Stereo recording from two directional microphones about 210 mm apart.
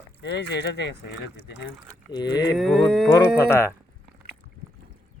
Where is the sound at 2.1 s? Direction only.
20° left (ahead or behind).